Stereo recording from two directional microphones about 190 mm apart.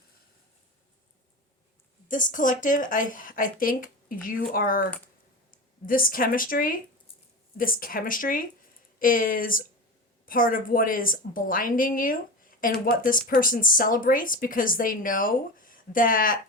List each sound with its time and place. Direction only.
2.0 s speech: 45° left (ahead or behind)